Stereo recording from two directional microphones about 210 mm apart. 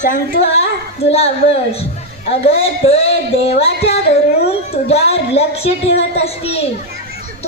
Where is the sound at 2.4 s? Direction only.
30° left (ahead or behind).